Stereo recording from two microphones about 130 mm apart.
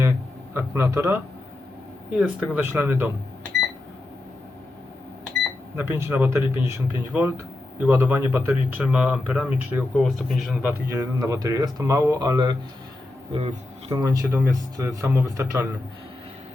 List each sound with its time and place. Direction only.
0.0 s a sound: 20° right (ahead or behind)
2.1 s speech: 10° right (ahead or behind)
5.7 s speech: 20° right (ahead or behind)
13.3 s speech: 50° right (ahead or behind)
14.0 s speech: 25° right (ahead or behind)